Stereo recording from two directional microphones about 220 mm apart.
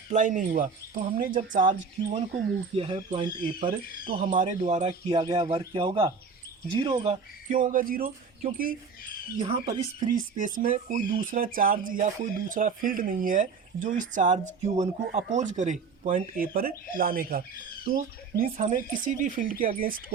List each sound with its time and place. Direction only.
0.1 s speech: 35° right (ahead or behind)
2.7 s speech: 25° right (ahead or behind)
4.3 s speech: 35° right (ahead or behind)
9.4 s speech: 25° right (ahead or behind)
10.0 s speech: 35° right (ahead or behind)